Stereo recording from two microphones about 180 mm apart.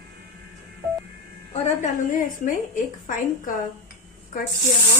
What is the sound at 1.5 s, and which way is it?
A woman's voice, 45° left (ahead or behind).